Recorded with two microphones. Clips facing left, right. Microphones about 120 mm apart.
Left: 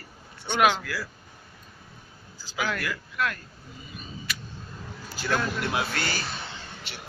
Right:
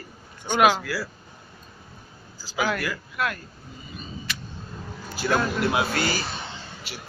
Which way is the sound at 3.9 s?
5° left (ahead or behind).